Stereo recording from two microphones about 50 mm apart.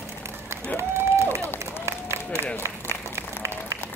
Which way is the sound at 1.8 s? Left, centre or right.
Right.